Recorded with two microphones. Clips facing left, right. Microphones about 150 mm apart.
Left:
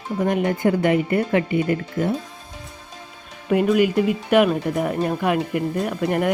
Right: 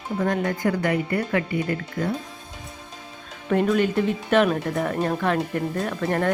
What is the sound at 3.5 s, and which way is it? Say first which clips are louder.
Speech: left 3 dB; 5° left (ahead or behind).